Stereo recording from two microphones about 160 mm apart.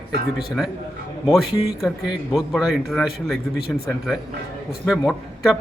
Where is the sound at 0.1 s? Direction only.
90° right.